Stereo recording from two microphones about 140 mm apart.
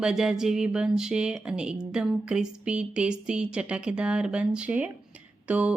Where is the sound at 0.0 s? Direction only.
5° right (ahead or behind).